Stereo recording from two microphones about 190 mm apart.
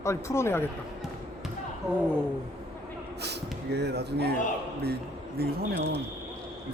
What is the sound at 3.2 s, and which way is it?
Speech, 60° right (ahead or behind).